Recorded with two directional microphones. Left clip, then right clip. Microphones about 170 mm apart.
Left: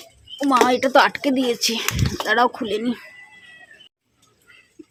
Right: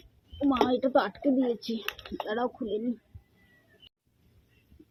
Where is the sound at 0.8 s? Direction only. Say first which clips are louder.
Left 10 dB; 25° left (ahead or behind).